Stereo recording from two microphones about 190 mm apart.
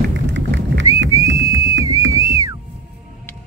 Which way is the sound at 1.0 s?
80° right.